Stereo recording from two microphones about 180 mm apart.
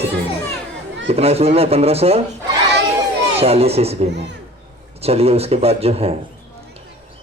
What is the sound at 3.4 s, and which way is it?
A man's voice, 35° right (ahead or behind).